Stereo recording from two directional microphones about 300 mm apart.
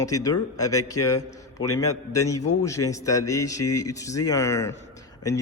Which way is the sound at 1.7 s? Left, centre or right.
Left.